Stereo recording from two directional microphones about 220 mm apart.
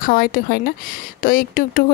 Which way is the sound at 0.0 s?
40° left (ahead or behind).